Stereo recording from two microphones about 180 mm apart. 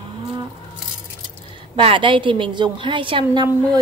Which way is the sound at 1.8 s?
30° right (ahead or behind).